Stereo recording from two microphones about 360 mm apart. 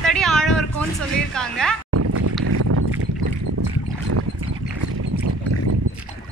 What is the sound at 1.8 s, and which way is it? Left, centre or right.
Boat, right.